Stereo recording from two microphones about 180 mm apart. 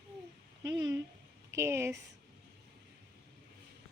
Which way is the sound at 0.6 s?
20° right (ahead or behind).